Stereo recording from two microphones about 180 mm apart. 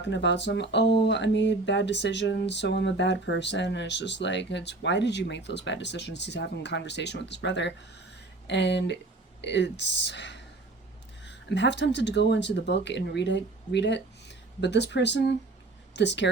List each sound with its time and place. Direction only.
0.0 s speech: 80° left